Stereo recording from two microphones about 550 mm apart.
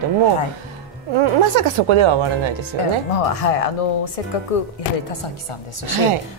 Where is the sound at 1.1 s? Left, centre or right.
Right.